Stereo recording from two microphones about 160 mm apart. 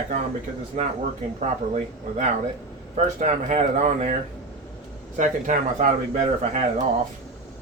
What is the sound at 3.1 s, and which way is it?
Speech, 50° right (ahead or behind).